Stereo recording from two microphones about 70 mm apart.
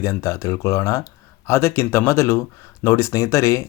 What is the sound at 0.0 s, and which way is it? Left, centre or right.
Speech, left.